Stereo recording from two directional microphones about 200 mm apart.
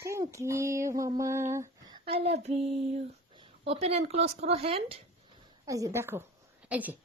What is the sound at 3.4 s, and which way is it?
Speech, 30° right (ahead or behind).